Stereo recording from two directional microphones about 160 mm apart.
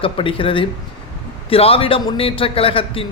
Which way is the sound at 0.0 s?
35° left (ahead or behind).